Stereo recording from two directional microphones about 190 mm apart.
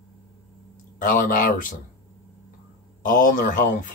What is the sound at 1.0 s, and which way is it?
Speech, 45° left (ahead or behind).